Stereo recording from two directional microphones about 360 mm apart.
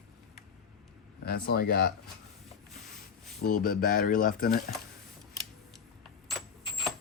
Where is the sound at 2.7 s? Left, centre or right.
Centre.